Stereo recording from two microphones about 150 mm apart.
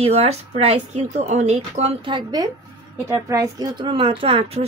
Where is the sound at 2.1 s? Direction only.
25° right (ahead or behind).